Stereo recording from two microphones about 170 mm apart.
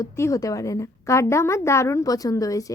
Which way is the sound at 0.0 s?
20° left (ahead or behind).